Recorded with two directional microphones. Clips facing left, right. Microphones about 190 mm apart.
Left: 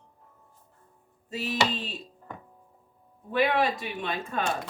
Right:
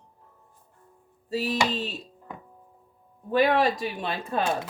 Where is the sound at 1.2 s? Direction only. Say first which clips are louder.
Right 5 dB; 35° right (ahead or behind).